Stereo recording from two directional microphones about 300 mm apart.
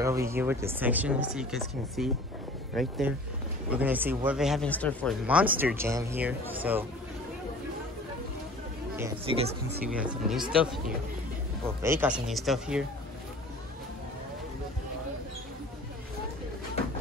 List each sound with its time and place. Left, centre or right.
0.0 s speech: centre
9.3 s speech: centre
9.8 s speech: centre
11.8 s speech: centre